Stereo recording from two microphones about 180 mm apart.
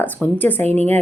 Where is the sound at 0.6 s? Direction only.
35° right (ahead or behind).